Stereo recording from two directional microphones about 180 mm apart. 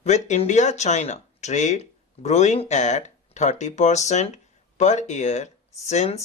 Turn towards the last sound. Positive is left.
turn(degrees=40)  # may be behind; listen again after turning